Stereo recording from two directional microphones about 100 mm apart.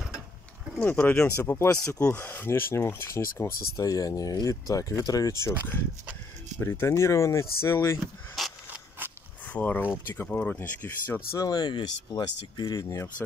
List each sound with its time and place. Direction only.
0.7 s speech: 20° left (ahead or behind)
1.6 s speech: 30° left (ahead or behind)
6.6 s speech: 25° left (ahead or behind)
8.4 s a sound: centre (ahead or behind)
9.5 s speech: 15° left (ahead or behind)
11.3 s speech: 45° left (ahead or behind)